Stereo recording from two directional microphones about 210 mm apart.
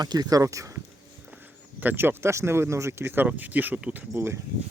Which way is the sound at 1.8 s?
10° right (ahead or behind).